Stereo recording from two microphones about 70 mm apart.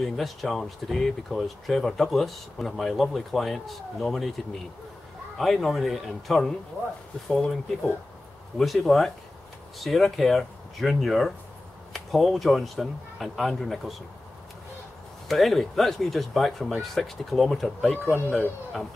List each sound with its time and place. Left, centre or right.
0.0 s speech: centre
5.4 s speech: centre
15.2 s speech: centre